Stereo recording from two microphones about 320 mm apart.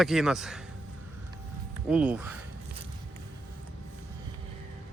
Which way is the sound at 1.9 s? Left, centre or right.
Centre.